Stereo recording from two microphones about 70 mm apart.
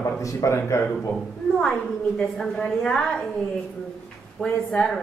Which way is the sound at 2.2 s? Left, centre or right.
Centre.